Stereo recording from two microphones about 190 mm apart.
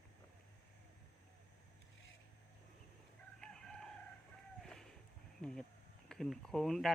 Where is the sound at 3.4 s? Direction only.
5° left (ahead or behind).